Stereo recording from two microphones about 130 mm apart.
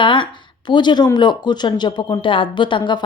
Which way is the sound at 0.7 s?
35° left (ahead or behind).